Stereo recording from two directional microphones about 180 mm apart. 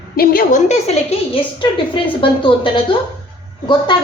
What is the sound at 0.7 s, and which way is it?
A woman's voice, 30° left (ahead or behind).